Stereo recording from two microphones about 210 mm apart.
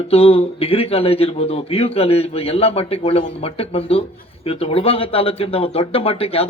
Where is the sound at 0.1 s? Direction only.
30° left (ahead or behind).